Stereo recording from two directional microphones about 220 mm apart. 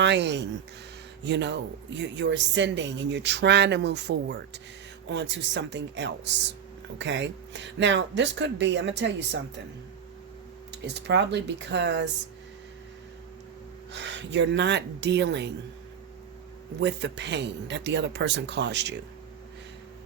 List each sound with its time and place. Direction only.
0.0 s a woman's voice: 55° right (ahead or behind)
10.7 s a woman's voice: 50° right (ahead or behind)
13.9 s a woman's voice: 55° right (ahead or behind)
16.8 s a woman's voice: 55° right (ahead or behind)